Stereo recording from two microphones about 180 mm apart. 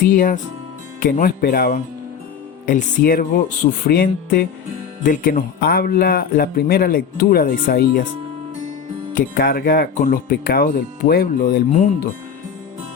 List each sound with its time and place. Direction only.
0.0 s speech: 50° left (ahead or behind)
9.1 s speech: 55° left (ahead or behind)